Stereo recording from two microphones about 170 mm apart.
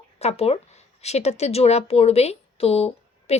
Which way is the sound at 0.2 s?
40° left (ahead or behind).